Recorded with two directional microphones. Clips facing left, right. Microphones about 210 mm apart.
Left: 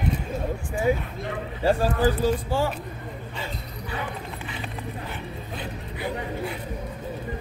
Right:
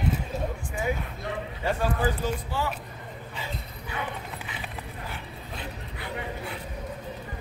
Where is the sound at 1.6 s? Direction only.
35° left (ahead or behind).